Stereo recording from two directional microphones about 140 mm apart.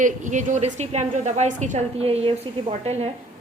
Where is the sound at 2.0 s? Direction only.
45° right (ahead or behind).